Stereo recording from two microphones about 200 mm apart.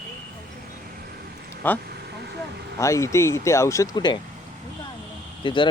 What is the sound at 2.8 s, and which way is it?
Speech, 15° left (ahead or behind).